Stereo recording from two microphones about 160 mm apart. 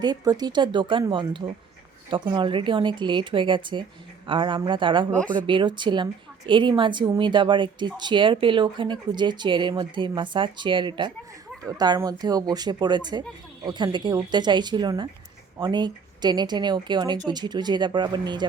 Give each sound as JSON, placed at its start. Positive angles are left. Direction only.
{"t": 0.0, "sound": "a woman's voice", "side_deg": -25}